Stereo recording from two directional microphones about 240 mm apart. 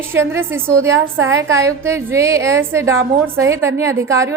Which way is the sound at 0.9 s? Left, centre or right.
Right.